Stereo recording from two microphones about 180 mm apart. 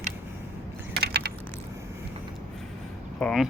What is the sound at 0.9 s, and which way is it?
Keys jangling, 65° right (ahead or behind).